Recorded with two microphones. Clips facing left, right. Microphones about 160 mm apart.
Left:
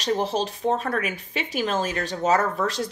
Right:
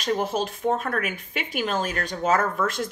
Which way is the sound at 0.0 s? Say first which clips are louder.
Left 1 dB; 35° left (ahead or behind).